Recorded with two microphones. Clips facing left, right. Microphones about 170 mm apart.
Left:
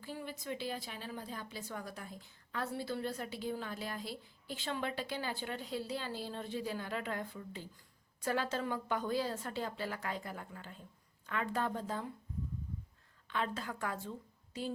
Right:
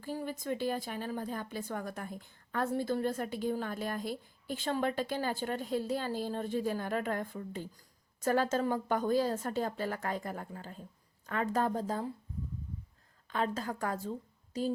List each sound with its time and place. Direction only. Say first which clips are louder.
0.0 s a woman's voice: right 6 dB; 45° right (ahead or behind)
13.2 s a woman's voice: right 4 dB; 40° right (ahead or behind)